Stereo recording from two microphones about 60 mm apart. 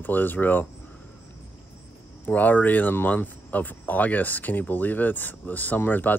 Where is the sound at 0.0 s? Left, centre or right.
Left.